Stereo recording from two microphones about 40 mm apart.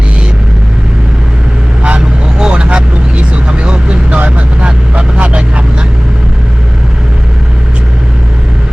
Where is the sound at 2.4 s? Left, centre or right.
Right.